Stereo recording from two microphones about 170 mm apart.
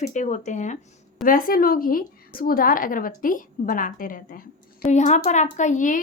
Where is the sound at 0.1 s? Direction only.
45° left (ahead or behind).